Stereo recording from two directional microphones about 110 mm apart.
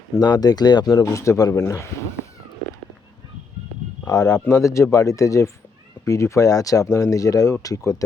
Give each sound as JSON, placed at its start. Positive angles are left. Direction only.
{"t": 0.2, "sound": "speech", "side_deg": 40}
{"t": 4.0, "sound": "speech", "side_deg": 35}